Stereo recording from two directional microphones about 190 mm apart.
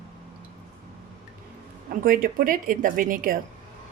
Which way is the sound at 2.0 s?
50° right (ahead or behind).